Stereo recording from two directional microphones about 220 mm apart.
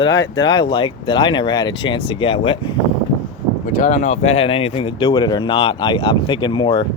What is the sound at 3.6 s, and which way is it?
Speech, 35° left (ahead or behind).